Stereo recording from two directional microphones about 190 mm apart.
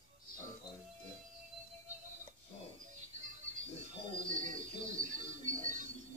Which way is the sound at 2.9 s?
40° right (ahead or behind).